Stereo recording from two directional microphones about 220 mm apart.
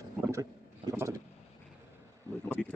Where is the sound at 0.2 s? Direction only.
15° right (ahead or behind).